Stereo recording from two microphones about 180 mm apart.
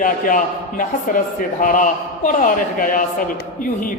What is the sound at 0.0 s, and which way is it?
A man's voice, 50° left (ahead or behind).